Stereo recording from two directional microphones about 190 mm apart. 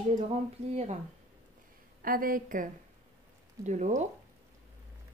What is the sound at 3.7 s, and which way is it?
Speech, 40° right (ahead or behind).